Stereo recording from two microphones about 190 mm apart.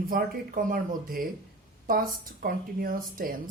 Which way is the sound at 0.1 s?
50° right (ahead or behind).